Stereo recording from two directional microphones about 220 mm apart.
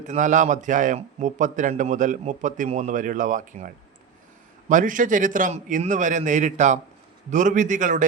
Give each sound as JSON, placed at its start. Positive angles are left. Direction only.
{"t": 0.0, "sound": "a man's voice", "side_deg": -35}
{"t": 4.7, "sound": "a man's voice", "side_deg": -35}